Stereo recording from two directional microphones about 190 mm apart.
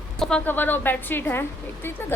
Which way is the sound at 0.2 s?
5° left (ahead or behind).